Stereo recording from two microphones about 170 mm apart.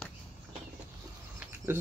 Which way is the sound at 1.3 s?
15° right (ahead or behind).